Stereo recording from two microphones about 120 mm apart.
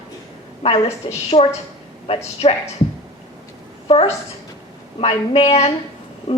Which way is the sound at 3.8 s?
55° left (ahead or behind).